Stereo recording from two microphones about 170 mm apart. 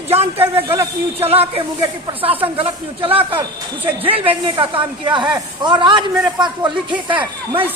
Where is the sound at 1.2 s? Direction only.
35° right (ahead or behind).